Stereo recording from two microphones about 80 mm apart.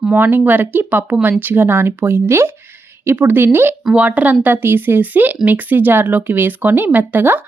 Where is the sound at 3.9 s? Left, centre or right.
Centre.